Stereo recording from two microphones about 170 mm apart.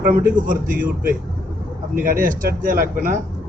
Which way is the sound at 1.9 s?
55° right (ahead or behind).